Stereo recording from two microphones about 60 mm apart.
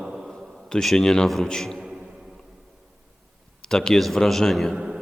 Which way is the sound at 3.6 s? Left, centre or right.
Centre.